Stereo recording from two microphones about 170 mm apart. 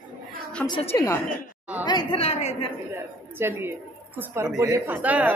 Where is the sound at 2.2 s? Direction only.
40° left (ahead or behind).